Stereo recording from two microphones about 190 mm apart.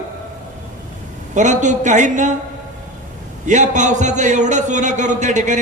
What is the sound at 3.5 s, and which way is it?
A man's voice, 40° right (ahead or behind).